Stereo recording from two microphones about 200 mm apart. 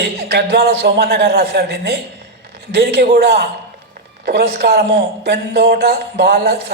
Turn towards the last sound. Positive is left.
turn(degrees=-50)  # may be behind; listen again after turning